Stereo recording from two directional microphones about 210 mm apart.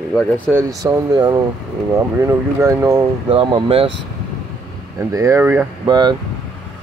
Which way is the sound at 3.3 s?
25° right (ahead or behind).